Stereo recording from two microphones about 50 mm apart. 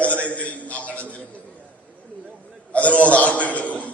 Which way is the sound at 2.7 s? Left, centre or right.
Left.